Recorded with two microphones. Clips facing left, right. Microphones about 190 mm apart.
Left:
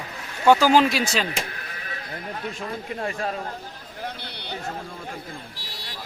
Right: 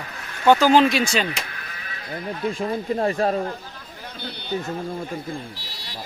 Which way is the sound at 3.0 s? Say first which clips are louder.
Right 7 dB; 35° right (ahead or behind).